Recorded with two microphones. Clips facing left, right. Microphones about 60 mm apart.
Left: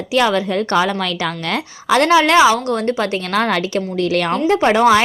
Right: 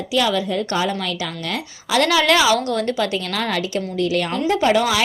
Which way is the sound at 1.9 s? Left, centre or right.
Left.